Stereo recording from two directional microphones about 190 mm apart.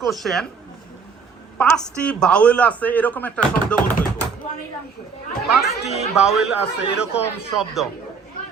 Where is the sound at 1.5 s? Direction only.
5° left (ahead or behind).